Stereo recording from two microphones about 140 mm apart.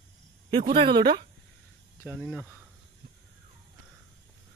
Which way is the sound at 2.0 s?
10° left (ahead or behind).